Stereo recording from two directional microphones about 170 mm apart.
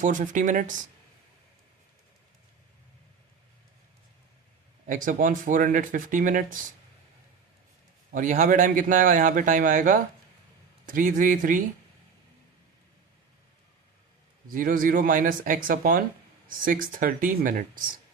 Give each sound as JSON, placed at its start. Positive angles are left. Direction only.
{"t": 0.0, "sound": "speech", "side_deg": -50}
{"t": 4.9, "sound": "speech", "side_deg": -50}
{"t": 8.1, "sound": "speech", "side_deg": -50}
{"t": 14.5, "sound": "speech", "side_deg": -55}